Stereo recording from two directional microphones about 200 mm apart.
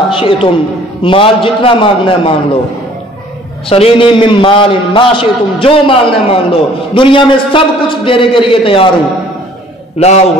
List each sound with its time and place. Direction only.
0.1 s a man's voice: 25° left (ahead or behind)
3.6 s a man's voice: 30° left (ahead or behind)
9.9 s a man's voice: 30° left (ahead or behind)